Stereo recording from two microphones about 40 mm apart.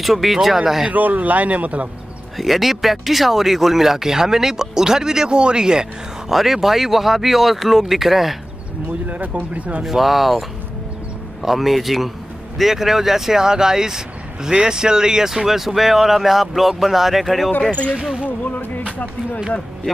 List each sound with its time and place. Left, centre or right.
0.0 s speech: centre
0.9 s speech: right
2.3 s speech: centre
6.2 s speech: centre
9.1 s speech: right
9.8 s speech: centre
11.4 s speech: centre
17.6 s speech: left
18.2 s music: left